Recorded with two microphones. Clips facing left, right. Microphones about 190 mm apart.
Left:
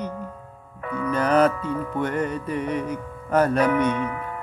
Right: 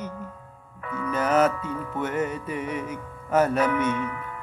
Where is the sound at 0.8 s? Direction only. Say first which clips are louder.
Left 4 dB; 35° left (ahead or behind).